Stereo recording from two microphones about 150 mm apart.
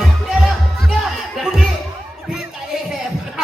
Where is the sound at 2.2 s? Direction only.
5° right (ahead or behind).